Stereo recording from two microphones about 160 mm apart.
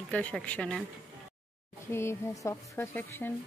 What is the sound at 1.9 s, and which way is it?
A woman's voice, 20° left (ahead or behind).